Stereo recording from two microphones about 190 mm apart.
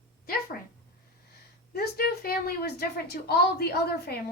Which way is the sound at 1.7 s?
55° left (ahead or behind).